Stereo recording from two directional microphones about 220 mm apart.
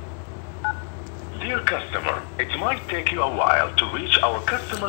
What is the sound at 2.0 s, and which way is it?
Speech, 10° left (ahead or behind).